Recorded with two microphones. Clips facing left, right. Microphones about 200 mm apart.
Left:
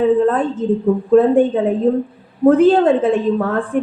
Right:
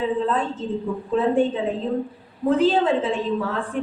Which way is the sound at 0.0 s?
55° left (ahead or behind).